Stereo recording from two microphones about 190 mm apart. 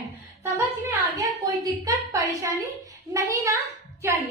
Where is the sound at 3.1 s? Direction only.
15° right (ahead or behind).